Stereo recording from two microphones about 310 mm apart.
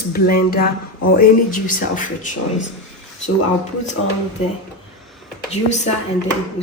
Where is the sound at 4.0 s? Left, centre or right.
Left.